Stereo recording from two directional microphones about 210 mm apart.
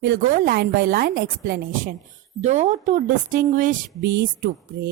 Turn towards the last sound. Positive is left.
turn(degrees=-50)  # may be behind; listen again after turning